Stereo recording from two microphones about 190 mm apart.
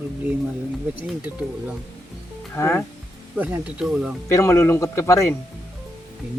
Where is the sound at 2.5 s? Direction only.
15° left (ahead or behind).